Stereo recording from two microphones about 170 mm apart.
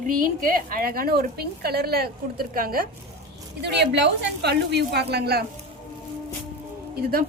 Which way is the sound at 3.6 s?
85° right.